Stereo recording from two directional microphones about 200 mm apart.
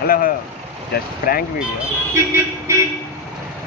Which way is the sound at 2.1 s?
15° right (ahead or behind).